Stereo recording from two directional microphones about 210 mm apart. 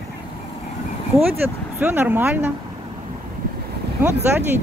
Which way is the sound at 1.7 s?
10° right (ahead or behind).